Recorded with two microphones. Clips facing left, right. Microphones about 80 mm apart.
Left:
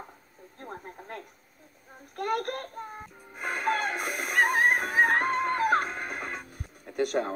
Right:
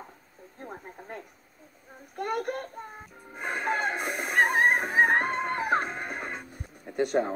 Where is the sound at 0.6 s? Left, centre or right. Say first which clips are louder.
Even; centre.